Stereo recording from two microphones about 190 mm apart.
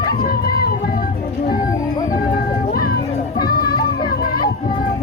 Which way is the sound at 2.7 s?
50° left (ahead or behind).